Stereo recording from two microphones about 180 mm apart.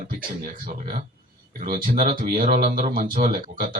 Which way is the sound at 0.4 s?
50° right (ahead or behind).